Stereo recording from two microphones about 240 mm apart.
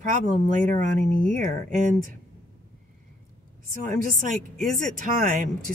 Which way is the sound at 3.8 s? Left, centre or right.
Right.